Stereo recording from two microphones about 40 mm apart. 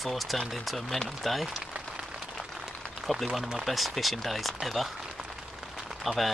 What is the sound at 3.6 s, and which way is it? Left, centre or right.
Speech, centre.